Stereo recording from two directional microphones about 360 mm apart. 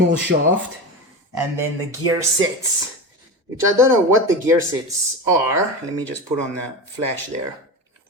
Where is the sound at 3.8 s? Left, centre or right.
Centre.